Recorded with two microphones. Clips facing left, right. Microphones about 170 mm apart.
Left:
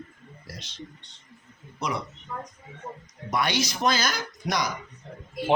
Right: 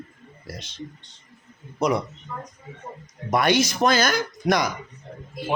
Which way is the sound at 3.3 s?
50° right (ahead or behind).